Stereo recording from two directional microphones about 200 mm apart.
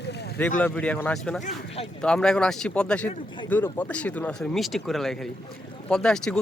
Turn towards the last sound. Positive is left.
turn(degrees=5)  # may be behind; listen again after turning